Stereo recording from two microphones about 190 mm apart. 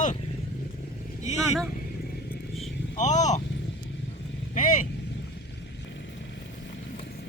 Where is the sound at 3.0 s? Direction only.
40° left (ahead or behind).